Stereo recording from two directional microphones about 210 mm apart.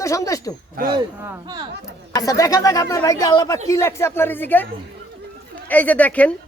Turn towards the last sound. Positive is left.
turn(degrees=5)  # may be behind; listen again after turning